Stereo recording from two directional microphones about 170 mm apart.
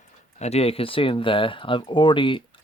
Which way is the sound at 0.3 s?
40° left (ahead or behind).